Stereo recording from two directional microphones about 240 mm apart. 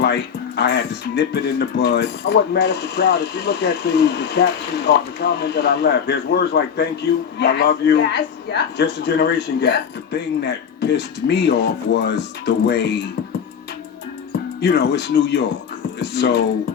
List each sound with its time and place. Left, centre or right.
0.0 s a man's voice: left
14.6 s a man's voice: left